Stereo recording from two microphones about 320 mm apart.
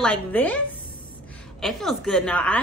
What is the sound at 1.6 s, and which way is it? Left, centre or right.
Speech, centre.